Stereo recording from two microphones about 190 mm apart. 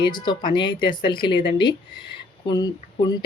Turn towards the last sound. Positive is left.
turn(degrees=20)  # may be behind; listen again after turning